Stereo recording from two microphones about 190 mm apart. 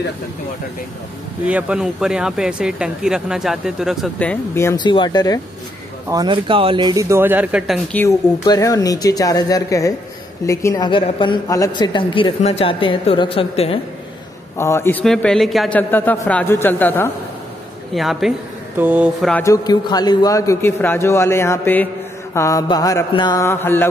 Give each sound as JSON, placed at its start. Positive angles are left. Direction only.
{"t": 1.4, "sound": "speech", "side_deg": -5}
{"t": 6.0, "sound": "speech", "side_deg": -20}
{"t": 8.0, "sound": "a woman's voice", "side_deg": 15}
{"t": 14.6, "sound": "a man's voice", "side_deg": 15}
{"t": 17.9, "sound": "speech", "side_deg": 0}
{"t": 19.2, "sound": "a man's voice", "side_deg": 10}